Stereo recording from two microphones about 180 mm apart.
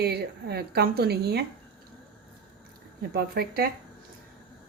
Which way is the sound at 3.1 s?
60° right (ahead or behind).